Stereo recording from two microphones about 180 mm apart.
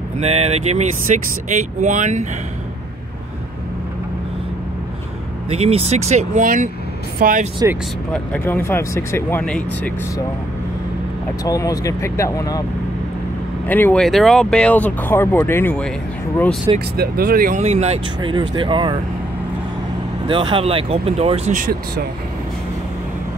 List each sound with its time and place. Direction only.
0.2 s speech: 35° right (ahead or behind)
5.5 s speech: 35° right (ahead or behind)
8.1 s speech: 10° left (ahead or behind)
11.4 s speech: 20° left (ahead or behind)
13.7 s speech: 10° left (ahead or behind)
16.9 s speech: 55° right (ahead or behind)
17.6 s speech: 40° right (ahead or behind)
20.2 s speech: 25° right (ahead or behind)
21.5 s speech: 60° right (ahead or behind)